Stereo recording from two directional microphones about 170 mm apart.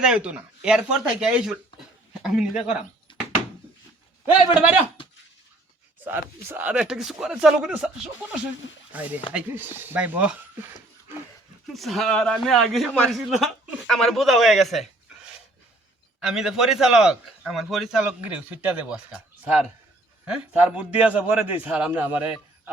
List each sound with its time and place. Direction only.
0.0 s a man's voice: 5° right (ahead or behind)
3.1 s door: 30° left (ahead or behind)
6.1 s a man's voice: 10° right (ahead or behind)
11.6 s a man's voice: centre (ahead or behind)